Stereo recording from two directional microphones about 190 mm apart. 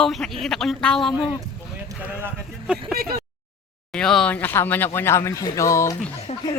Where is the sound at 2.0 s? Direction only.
5° right (ahead or behind).